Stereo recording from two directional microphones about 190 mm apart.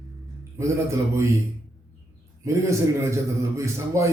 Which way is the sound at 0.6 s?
10° right (ahead or behind).